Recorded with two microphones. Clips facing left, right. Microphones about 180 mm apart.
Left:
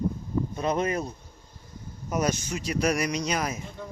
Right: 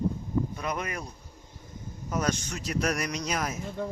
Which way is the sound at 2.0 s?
15° left (ahead or behind).